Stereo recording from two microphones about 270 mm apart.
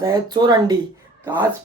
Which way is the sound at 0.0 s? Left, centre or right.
Centre.